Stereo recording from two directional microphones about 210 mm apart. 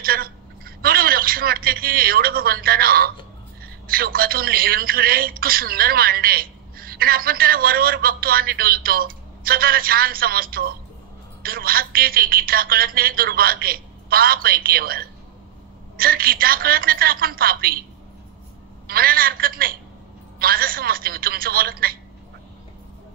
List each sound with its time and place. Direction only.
0.0 s a sound: 45° right (ahead or behind)
3.8 s a man's voice: 45° right (ahead or behind)
18.9 s a man's voice: 45° right (ahead or behind)